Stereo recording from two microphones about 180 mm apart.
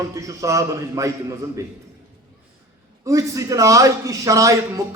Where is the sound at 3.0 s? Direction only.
20° right (ahead or behind).